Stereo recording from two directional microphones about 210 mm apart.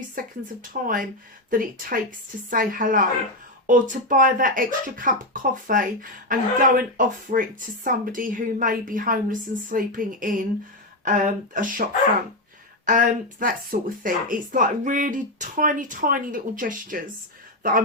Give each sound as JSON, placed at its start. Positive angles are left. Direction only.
{"t": 0.2, "sound": "speech", "side_deg": -40}
{"t": 12.9, "sound": "speech", "side_deg": -40}